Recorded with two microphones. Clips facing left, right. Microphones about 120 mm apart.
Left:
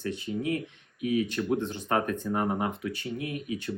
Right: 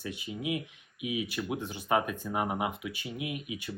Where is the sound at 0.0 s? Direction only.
10° right (ahead or behind).